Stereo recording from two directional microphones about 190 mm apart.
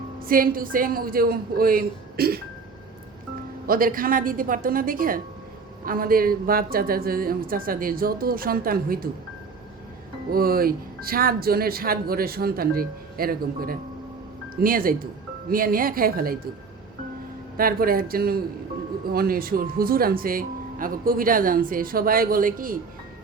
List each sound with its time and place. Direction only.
0.2 s speech: 50° right (ahead or behind)
3.7 s speech: 45° right (ahead or behind)
10.3 s speech: 50° right (ahead or behind)
17.6 s speech: 50° right (ahead or behind)